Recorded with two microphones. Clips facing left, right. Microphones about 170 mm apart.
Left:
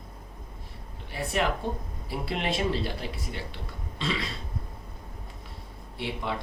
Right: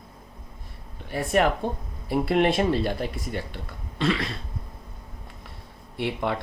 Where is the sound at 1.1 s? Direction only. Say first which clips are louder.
Right 6 dB; 55° right (ahead or behind).